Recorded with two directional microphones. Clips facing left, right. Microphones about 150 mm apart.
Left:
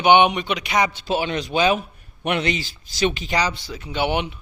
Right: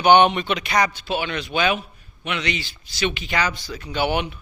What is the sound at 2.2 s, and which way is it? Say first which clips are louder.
Speech: left 4 dB; 45° left (ahead or behind).